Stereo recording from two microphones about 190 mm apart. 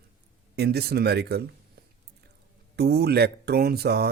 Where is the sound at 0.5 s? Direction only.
60° right (ahead or behind).